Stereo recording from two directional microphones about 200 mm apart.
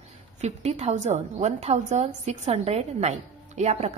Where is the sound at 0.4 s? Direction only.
30° right (ahead or behind).